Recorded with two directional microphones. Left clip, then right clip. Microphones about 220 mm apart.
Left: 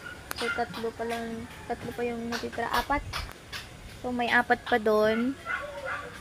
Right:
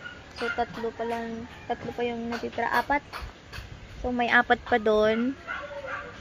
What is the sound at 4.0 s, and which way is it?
Speech, 15° right (ahead or behind).